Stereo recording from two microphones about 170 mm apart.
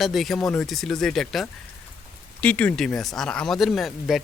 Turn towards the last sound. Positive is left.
turn(degrees=0)  # may be behind; listen again after turning